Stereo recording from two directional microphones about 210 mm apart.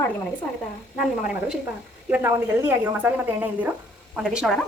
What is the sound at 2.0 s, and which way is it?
A woman's voice, 10° right (ahead or behind).